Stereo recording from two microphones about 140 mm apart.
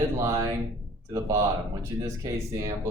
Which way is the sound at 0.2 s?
25° right (ahead or behind).